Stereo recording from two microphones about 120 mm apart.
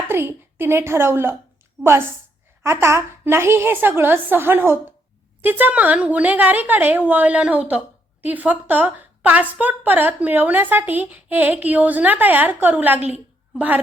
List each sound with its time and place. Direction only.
0.1 s a woman's voice: 20° right (ahead or behind)